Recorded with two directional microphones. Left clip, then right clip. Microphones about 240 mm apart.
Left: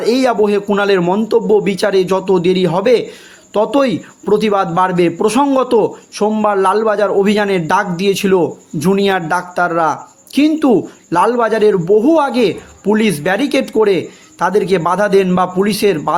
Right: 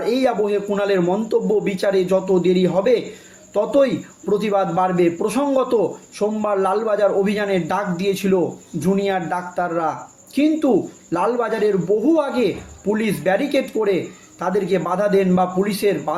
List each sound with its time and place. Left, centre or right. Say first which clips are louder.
0.0 s a man's voice: left 6 dB; left